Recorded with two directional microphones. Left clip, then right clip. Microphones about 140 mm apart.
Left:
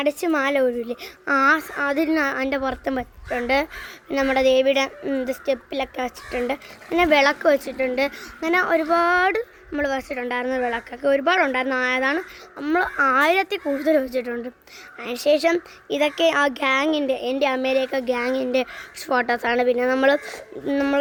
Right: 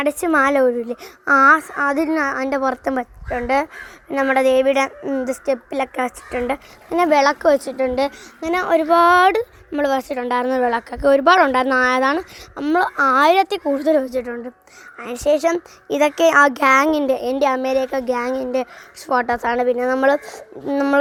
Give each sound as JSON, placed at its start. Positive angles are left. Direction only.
{"t": 0.0, "sound": "a woman's voice", "side_deg": -25}
{"t": 1.5, "sound": "a woman's voice", "side_deg": -20}
{"t": 6.3, "sound": "a woman's voice", "side_deg": -15}
{"t": 13.7, "sound": "speech", "side_deg": -15}
{"t": 15.9, "sound": "a woman's voice", "side_deg": -30}
{"t": 18.4, "sound": "speech", "side_deg": 0}